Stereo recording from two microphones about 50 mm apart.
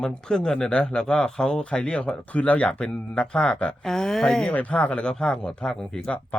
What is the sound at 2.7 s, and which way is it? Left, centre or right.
Speech, centre.